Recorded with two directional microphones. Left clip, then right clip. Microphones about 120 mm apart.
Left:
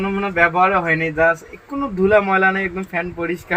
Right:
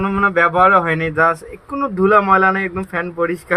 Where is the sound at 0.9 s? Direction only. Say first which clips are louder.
Right 1 dB; centre (ahead or behind).